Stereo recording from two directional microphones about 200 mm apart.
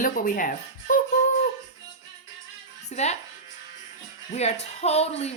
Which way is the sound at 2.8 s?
35° left (ahead or behind).